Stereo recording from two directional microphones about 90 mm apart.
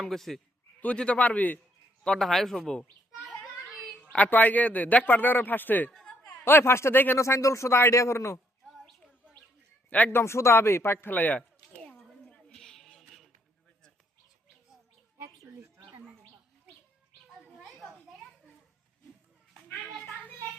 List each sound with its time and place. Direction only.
0.0 s speech: 5° left (ahead or behind)
0.8 s a man's voice: 15° left (ahead or behind)
2.0 s speech: centre (ahead or behind)
3.2 s children playing: 5° left (ahead or behind)
4.1 s a man's voice: 15° left (ahead or behind)
5.9 s a sound: 5° left (ahead or behind)
6.4 s a man's voice: 25° left (ahead or behind)
7.2 s speech: 35° left (ahead or behind)
8.6 s a sound: centre (ahead or behind)
10.1 s speech: 30° left (ahead or behind); by 12.4 s 10° left (ahead or behind)
12.4 s a sound: 5° left (ahead or behind)
17.7 s children playing: 5° left (ahead or behind)